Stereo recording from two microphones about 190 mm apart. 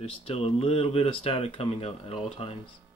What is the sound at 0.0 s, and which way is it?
Speech, 30° left (ahead or behind).